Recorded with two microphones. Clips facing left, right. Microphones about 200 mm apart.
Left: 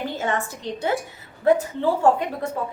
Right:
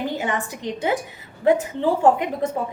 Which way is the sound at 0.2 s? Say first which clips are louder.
Even; 15° right (ahead or behind).